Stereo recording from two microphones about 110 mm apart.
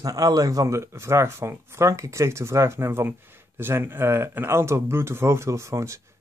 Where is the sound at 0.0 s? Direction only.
35° right (ahead or behind).